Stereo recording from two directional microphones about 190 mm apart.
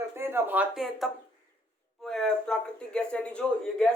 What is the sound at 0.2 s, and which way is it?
Speech, 10° right (ahead or behind).